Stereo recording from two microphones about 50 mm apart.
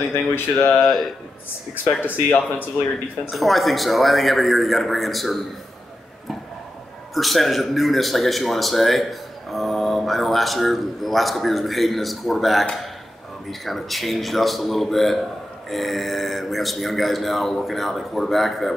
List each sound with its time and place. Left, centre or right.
0.1 s speech: left
0.7 s a man's voice: centre
2.0 s speech: left
3.3 s a man's voice: centre
7.2 s a man's voice: centre